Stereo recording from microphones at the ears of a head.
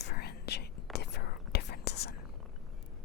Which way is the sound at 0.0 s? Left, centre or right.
Left.